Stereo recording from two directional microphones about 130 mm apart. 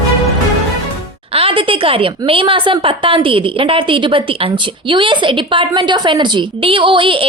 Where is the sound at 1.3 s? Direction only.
45° right (ahead or behind).